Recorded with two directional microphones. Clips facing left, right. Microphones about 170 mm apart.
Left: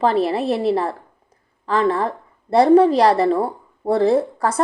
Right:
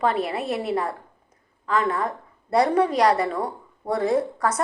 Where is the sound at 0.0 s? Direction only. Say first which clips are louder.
Left 6 dB; 30° left (ahead or behind).